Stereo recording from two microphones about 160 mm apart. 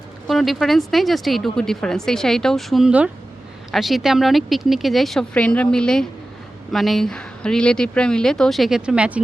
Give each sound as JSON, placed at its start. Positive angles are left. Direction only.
{"t": 0.3, "sound": "speech", "side_deg": 0}